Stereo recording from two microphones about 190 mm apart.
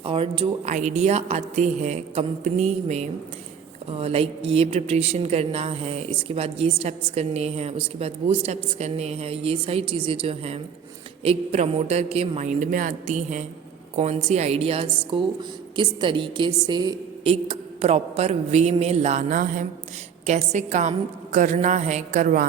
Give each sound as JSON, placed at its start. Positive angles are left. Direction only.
{"t": 0.0, "sound": "speech", "side_deg": -30}